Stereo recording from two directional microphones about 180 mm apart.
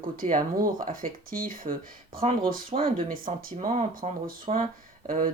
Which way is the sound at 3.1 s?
50° right (ahead or behind).